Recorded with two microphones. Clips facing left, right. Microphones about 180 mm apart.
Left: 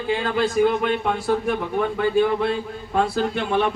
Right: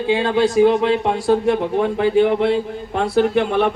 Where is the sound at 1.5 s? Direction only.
70° right (ahead or behind).